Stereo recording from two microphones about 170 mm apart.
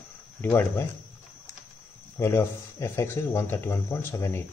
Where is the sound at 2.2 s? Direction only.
15° left (ahead or behind).